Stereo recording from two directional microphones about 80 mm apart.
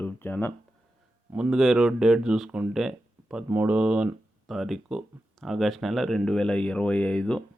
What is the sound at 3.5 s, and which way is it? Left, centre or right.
Speech, right.